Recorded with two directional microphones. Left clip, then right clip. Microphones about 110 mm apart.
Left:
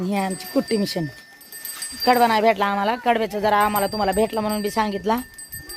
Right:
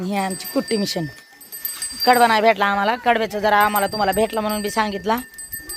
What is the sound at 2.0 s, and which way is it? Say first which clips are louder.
Speech: right 2 dB; 15° left (ahead or behind).